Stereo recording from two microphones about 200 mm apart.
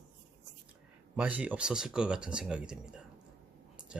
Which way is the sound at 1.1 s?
5° right (ahead or behind).